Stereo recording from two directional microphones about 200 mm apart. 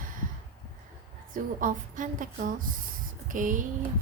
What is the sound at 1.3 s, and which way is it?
A woman's voice, 40° right (ahead or behind).